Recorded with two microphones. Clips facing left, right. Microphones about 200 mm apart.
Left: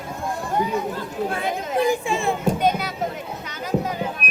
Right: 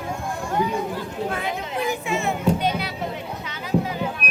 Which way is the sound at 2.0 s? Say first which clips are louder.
Left 2 dB; 30° left (ahead or behind).